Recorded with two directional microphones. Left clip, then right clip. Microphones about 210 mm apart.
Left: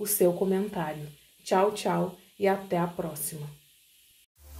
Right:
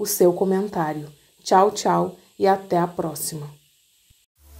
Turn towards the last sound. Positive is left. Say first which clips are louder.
# right 8 dB
turn(degrees=-35)  # may be behind; listen again after turning